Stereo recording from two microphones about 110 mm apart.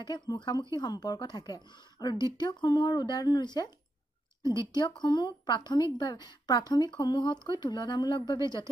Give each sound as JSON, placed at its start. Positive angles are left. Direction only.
{"t": 0.0, "sound": "a woman's voice", "side_deg": 40}